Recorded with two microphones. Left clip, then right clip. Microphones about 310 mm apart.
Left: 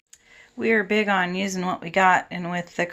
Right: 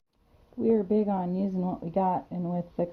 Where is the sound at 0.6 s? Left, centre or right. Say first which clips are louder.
Left 4 dB; left.